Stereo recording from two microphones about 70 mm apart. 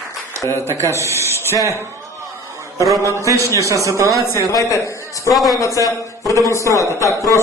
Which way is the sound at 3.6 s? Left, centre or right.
Right.